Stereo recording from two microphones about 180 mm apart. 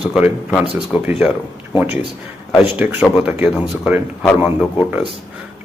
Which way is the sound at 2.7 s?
10° right (ahead or behind).